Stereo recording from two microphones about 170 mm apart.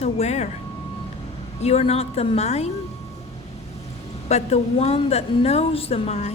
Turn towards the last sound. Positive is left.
turn(degrees=40)  # may be behind; listen again after turning